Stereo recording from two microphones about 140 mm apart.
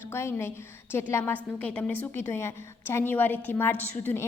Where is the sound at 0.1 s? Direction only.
20° left (ahead or behind).